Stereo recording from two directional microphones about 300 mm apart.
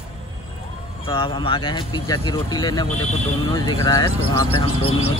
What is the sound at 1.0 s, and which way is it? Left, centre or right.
Speech, centre.